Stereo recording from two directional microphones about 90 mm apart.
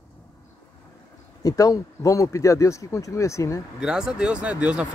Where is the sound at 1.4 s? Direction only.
40° left (ahead or behind).